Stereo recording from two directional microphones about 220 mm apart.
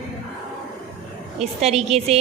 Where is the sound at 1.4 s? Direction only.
30° right (ahead or behind).